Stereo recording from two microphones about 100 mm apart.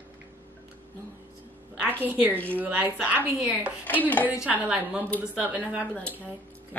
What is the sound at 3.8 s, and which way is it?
Speech, 15° left (ahead or behind).